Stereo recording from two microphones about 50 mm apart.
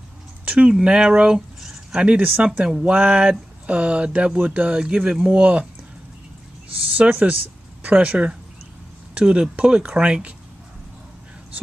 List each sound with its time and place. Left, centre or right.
0.5 s speech: right
1.6 s a sound: centre
2.0 s speech: right
7.0 s speech: right